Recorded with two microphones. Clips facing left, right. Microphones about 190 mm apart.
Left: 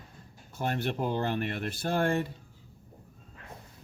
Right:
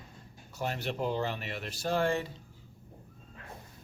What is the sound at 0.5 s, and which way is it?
Speech, 55° left (ahead or behind).